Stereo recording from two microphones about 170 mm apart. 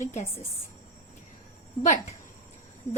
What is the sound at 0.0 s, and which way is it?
Speech, 45° left (ahead or behind).